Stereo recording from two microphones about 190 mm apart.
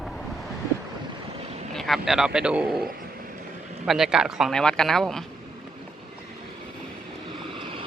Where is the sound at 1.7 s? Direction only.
Centre (ahead or behind).